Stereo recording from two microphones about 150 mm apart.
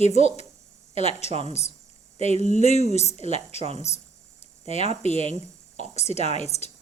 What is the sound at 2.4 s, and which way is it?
Speech, 50° left (ahead or behind).